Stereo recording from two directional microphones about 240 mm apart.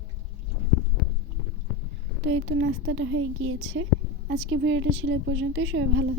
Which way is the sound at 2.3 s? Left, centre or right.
Right.